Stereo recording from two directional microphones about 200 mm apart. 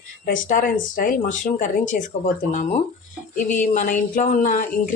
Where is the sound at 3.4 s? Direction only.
40° left (ahead or behind).